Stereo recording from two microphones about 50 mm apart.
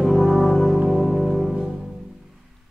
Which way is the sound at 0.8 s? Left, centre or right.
Centre.